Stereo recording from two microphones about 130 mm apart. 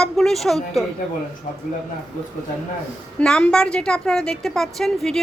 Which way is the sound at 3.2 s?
5° left (ahead or behind).